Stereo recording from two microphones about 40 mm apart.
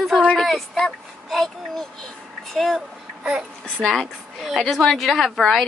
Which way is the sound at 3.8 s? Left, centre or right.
Centre.